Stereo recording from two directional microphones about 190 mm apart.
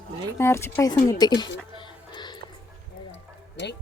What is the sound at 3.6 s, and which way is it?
Speech, 70° left (ahead or behind).